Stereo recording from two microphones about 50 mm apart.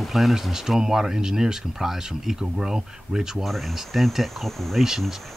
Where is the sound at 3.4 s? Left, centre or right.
Centre.